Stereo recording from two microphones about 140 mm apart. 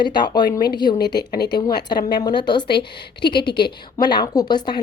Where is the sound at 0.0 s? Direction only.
35° left (ahead or behind).